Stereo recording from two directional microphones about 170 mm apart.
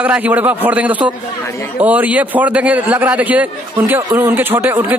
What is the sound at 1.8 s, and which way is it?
Speech, 10° right (ahead or behind).